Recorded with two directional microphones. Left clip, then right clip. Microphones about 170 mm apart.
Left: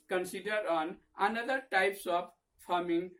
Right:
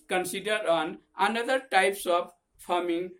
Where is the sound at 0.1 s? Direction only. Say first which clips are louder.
Right 6 dB; 20° right (ahead or behind).